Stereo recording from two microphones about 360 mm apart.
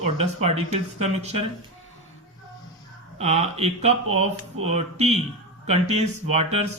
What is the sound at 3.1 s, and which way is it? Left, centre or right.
Speech, centre.